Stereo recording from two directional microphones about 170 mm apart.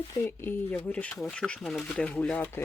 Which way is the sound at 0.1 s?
15° left (ahead or behind).